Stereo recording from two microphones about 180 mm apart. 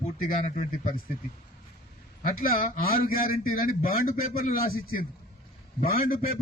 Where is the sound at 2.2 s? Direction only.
50° left (ahead or behind).